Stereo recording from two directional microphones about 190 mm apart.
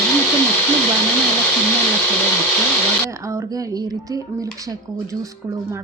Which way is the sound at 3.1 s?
15° right (ahead or behind).